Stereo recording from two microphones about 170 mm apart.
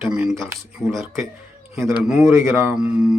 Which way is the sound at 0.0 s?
5° right (ahead or behind).